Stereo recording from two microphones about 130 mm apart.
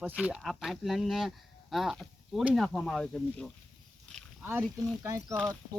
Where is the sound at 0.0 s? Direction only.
10° right (ahead or behind).